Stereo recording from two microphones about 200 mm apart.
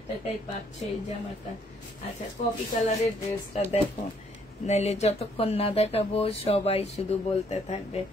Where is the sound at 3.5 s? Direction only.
30° left (ahead or behind).